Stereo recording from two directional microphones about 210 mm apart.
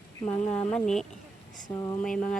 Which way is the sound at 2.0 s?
5° left (ahead or behind).